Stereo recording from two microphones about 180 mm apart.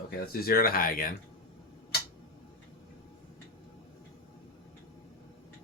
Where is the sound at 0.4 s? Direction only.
55° left (ahead or behind).